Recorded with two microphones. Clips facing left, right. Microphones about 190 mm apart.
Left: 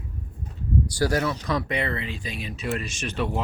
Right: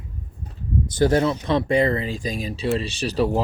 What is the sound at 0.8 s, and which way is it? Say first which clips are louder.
Speech: right 7 dB; 20° right (ahead or behind).